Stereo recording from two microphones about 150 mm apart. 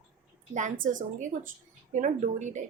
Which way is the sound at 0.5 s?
55° right (ahead or behind).